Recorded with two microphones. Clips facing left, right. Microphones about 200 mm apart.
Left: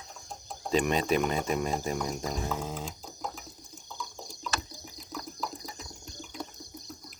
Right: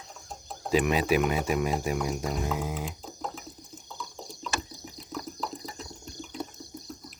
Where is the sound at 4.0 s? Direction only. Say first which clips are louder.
Right 1 dB; centre (ahead or behind).